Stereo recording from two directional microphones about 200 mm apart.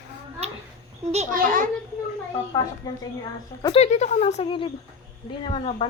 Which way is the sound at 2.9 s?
20° left (ahead or behind).